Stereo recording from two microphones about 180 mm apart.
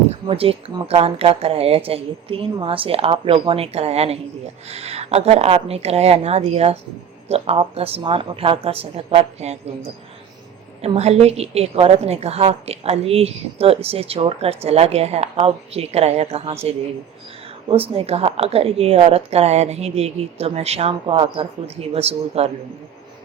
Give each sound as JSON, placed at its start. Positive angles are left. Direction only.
{"t": 0.3, "sound": "a woman's voice", "side_deg": -30}
{"t": 17.7, "sound": "a woman's voice", "side_deg": -30}